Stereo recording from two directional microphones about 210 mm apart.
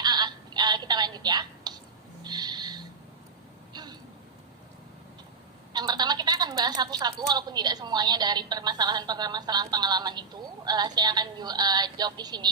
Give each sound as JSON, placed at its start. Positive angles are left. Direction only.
{"t": 0.0, "sound": "telephone", "side_deg": -20}
{"t": 2.2, "sound": "owl", "side_deg": -20}
{"t": 3.7, "sound": "a sound", "side_deg": -20}
{"t": 5.7, "sound": "a woman's voice", "side_deg": -20}